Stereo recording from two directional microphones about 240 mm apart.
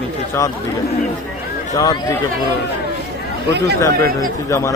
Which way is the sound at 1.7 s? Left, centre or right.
Centre.